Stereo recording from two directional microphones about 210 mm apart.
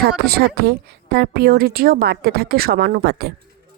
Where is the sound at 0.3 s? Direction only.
50° right (ahead or behind).